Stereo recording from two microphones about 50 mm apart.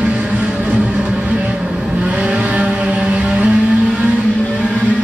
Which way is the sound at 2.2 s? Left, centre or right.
Right.